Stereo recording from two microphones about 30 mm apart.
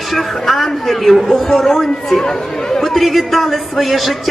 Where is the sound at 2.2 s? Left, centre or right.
Left; by 4.3 s centre.